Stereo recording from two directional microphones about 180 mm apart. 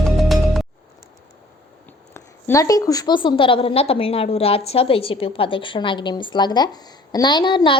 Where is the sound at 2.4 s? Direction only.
15° left (ahead or behind).